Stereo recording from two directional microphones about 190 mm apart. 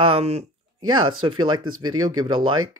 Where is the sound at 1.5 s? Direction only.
90° right.